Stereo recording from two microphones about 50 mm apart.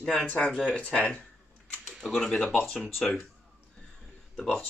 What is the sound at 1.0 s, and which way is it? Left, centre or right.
Speech, left.